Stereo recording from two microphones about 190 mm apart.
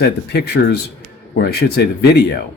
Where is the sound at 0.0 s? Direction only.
60° left (ahead or behind).